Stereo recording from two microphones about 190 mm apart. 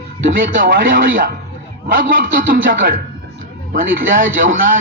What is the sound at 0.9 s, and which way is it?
A man's voice, 50° right (ahead or behind).